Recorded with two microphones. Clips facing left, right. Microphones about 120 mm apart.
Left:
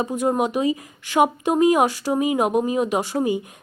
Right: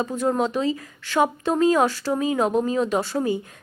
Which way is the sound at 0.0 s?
15° left (ahead or behind).